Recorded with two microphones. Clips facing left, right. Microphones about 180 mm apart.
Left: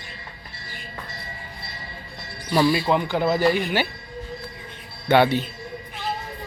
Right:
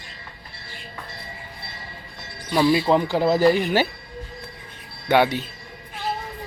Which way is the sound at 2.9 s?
30° right (ahead or behind).